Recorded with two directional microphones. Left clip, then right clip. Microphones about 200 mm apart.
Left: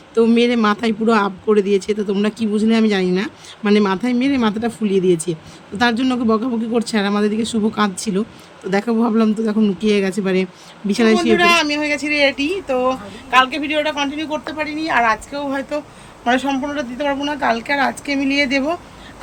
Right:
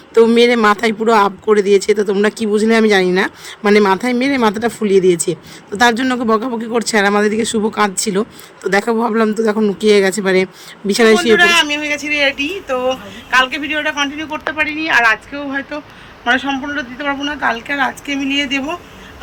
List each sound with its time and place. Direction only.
0.1 s speech: 25° right (ahead or behind)
11.3 s a woman's voice: 5° left (ahead or behind)